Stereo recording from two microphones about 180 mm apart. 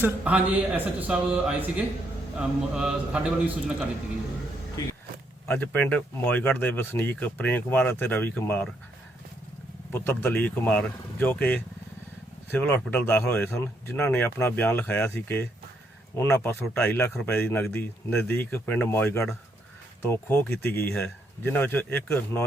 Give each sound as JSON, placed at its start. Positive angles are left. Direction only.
{"t": 0.0, "sound": "a man's voice", "side_deg": -5}
{"t": 5.5, "sound": "speech", "side_deg": 10}
{"t": 9.9, "sound": "speech", "side_deg": 10}